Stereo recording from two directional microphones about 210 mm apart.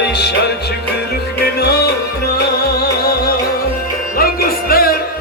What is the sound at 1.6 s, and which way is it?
Music, 50° left (ahead or behind).